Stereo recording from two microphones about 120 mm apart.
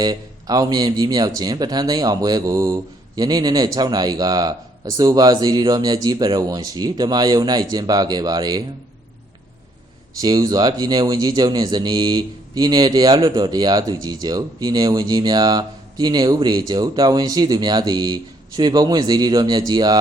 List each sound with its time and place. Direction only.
0.0 s speech: 35° right (ahead or behind)
10.2 s speech: 30° right (ahead or behind)